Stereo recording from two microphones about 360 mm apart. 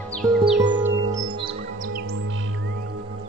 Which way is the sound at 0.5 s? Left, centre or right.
Centre.